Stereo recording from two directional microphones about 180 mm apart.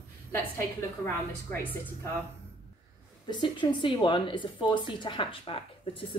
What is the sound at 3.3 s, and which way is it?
A woman's voice, 25° left (ahead or behind).